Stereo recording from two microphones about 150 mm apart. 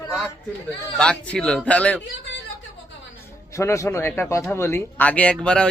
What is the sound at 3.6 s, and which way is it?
A woman's voice, 20° left (ahead or behind).